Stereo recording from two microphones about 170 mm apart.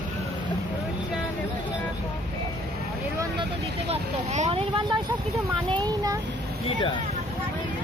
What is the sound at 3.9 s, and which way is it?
Vehicle, 40° right (ahead or behind).